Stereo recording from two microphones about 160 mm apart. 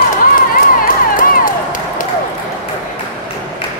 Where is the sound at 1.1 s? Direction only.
55° left (ahead or behind).